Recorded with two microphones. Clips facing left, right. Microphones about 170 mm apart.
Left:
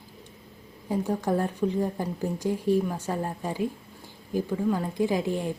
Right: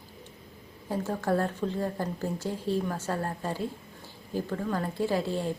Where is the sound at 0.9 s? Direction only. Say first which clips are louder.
Left 2 dB; 15° left (ahead or behind).